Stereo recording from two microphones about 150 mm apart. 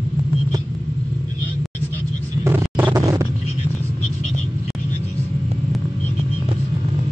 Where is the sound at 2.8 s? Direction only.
25° right (ahead or behind).